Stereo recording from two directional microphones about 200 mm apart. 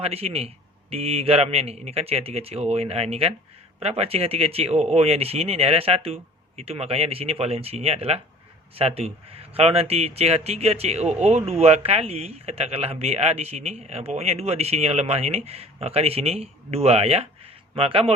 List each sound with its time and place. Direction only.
0.0 s speech: 30° right (ahead or behind)